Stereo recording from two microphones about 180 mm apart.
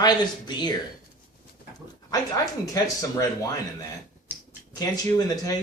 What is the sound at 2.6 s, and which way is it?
Speech, 20° left (ahead or behind).